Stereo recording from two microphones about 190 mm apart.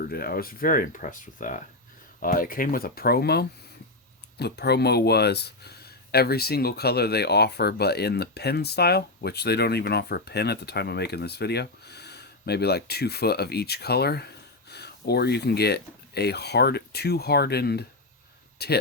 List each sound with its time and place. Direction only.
0.0 s speech: 50° left (ahead or behind)